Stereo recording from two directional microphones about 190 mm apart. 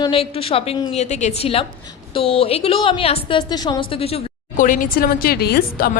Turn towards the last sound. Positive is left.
turn(degrees=50)  # may be behind; listen again after turning